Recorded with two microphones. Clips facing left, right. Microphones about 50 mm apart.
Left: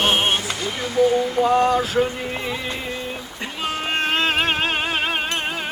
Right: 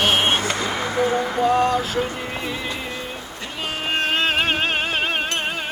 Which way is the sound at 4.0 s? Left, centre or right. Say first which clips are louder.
Even; centre.